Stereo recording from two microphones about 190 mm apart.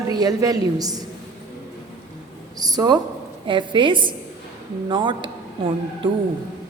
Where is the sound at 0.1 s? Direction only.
20° right (ahead or behind).